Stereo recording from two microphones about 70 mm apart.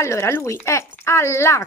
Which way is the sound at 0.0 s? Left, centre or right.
Left.